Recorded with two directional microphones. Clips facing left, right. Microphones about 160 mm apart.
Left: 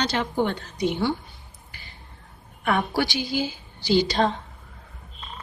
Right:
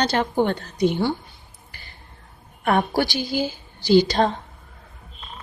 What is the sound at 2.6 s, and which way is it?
A woman's voice, 45° right (ahead or behind).